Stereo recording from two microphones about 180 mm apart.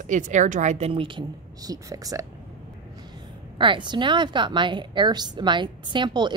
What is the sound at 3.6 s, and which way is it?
A woman's voice, 25° right (ahead or behind).